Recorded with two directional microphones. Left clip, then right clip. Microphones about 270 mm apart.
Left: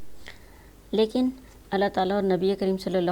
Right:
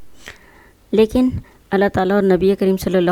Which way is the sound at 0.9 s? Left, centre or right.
Right.